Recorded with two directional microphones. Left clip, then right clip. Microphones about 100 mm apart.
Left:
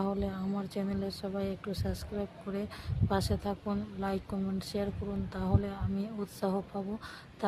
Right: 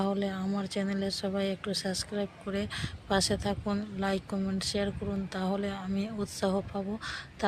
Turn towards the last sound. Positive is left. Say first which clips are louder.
# right 4 dB
turn(degrees=-10)  # may be behind; listen again after turning